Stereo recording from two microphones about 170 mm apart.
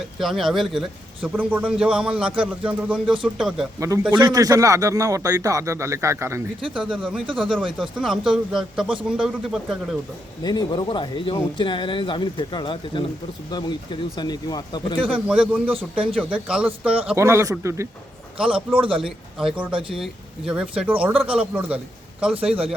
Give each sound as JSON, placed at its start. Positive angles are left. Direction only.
{"t": 0.2, "sound": "a man's voice", "side_deg": 0}
{"t": 3.8, "sound": "speech", "side_deg": -15}
{"t": 6.7, "sound": "a man's voice", "side_deg": 0}
{"t": 10.4, "sound": "speech", "side_deg": 25}
{"t": 15.0, "sound": "speech", "side_deg": -5}
{"t": 15.7, "sound": "a man's voice", "side_deg": -30}
{"t": 16.3, "sound": "speech", "side_deg": -5}
{"t": 17.2, "sound": "speech", "side_deg": -15}
{"t": 18.4, "sound": "a man's voice", "side_deg": -30}
{"t": 19.0, "sound": "a man's voice", "side_deg": -5}